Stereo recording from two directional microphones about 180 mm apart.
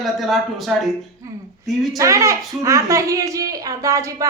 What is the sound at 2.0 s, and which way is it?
A woman's voice, 15° right (ahead or behind).